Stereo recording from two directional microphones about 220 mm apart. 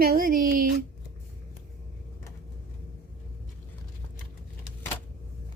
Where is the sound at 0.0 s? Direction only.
45° right (ahead or behind).